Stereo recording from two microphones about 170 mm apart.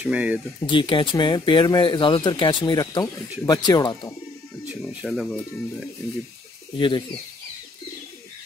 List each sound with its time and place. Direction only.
0.0 s speech: 10° right (ahead or behind)
0.7 s speech: 30° left (ahead or behind)
5.0 s speech: 5° right (ahead or behind)
6.8 s speech: 30° left (ahead or behind)